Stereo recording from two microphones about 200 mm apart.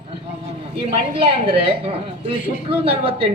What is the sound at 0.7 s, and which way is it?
A woman's voice, 25° right (ahead or behind).